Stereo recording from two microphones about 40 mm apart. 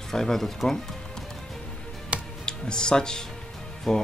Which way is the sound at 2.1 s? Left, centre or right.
Right.